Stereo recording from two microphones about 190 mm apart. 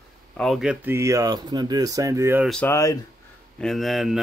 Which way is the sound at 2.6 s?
15° left (ahead or behind).